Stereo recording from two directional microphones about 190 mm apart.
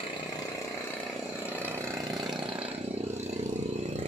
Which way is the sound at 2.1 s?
Centre (ahead or behind).